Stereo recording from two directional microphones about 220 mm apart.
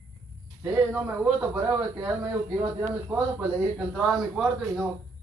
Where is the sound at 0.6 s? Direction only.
10° right (ahead or behind).